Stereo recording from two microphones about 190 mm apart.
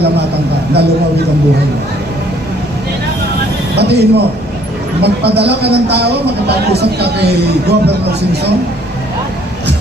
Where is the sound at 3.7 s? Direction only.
60° right (ahead or behind).